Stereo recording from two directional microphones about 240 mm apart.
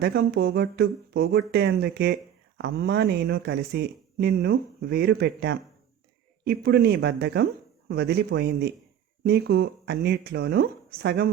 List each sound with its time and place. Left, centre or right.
0.0 s speech: right